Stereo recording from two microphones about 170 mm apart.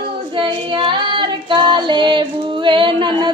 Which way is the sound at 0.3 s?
25° right (ahead or behind).